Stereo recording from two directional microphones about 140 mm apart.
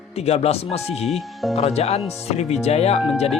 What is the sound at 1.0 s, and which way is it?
Speech, centre (ahead or behind).